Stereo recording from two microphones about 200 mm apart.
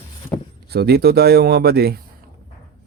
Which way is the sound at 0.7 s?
50° right (ahead or behind).